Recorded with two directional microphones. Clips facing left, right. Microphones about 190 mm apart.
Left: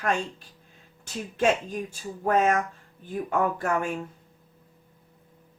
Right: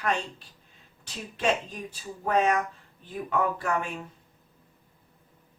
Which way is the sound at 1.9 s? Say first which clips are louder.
Left 2 dB; 45° left (ahead or behind).